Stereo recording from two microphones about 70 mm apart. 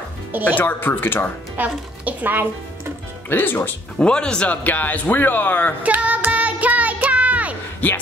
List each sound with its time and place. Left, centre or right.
0.3 s speech: right
0.6 s speech: left
1.6 s a woman's voice: right
3.3 s speech: left
4.0 s speech: centre
5.9 s child singing: right
7.8 s speech: left